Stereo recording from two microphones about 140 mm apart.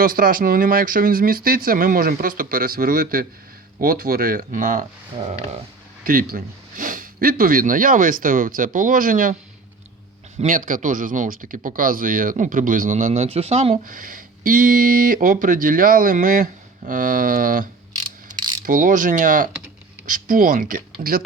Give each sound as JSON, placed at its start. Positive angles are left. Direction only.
{"t": 0.0, "sound": "speech", "side_deg": -90}
{"t": 5.1, "sound": "speech", "side_deg": -45}
{"t": 6.1, "sound": "speech", "side_deg": -90}
{"t": 10.4, "sound": "speech", "side_deg": -75}
{"t": 13.2, "sound": "speech", "side_deg": -45}
{"t": 13.8, "sound": "speech", "side_deg": -75}
{"t": 18.3, "sound": "mechanisms", "side_deg": -30}
{"t": 18.6, "sound": "speech", "side_deg": -70}